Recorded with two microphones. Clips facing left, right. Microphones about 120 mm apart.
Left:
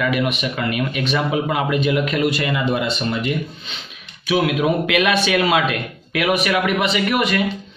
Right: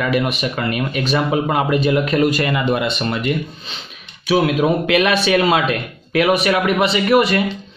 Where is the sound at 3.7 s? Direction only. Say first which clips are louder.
Right 1 dB; 35° right (ahead or behind).